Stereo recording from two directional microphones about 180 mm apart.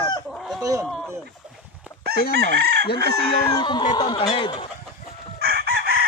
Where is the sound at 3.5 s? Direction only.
25° left (ahead or behind).